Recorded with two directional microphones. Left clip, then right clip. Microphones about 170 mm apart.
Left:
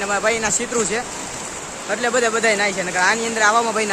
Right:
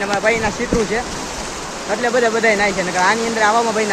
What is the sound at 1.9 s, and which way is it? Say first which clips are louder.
Speech: right 2 dB; 15° left (ahead or behind).